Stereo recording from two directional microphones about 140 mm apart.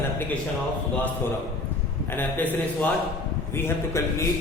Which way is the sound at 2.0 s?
15° left (ahead or behind).